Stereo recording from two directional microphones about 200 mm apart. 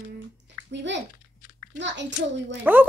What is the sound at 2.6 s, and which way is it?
Speech, 10° right (ahead or behind).